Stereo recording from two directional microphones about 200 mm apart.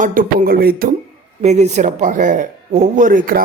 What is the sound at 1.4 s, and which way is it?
Speech, 35° right (ahead or behind).